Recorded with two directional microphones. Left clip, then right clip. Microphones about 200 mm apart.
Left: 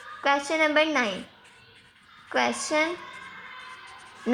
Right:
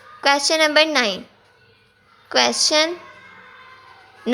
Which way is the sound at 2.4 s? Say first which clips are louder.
Right 7 dB; 45° right (ahead or behind).